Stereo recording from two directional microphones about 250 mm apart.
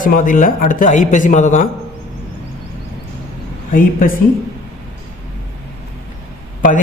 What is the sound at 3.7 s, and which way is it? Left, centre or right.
Speech, left.